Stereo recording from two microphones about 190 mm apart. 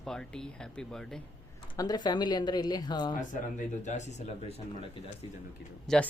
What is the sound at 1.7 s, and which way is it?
Speech, 20° left (ahead or behind).